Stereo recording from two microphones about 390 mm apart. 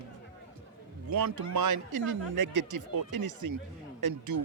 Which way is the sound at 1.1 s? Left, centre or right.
Right.